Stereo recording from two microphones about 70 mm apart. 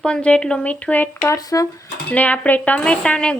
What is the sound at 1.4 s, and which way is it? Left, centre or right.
Speech, left.